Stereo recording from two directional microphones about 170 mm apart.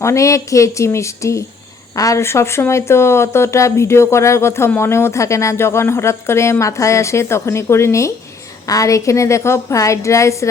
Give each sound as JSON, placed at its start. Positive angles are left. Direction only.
{"t": 0.0, "sound": "speech", "side_deg": 20}